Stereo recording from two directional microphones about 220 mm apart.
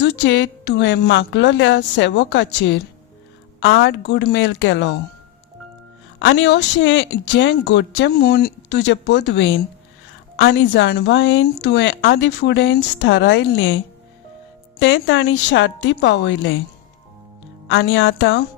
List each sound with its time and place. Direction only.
0.0 s a woman's voice: 55° left (ahead or behind)
6.1 s a woman's voice: 60° left (ahead or behind)
14.8 s a woman's voice: 60° left (ahead or behind)
17.7 s a woman's voice: 65° left (ahead or behind)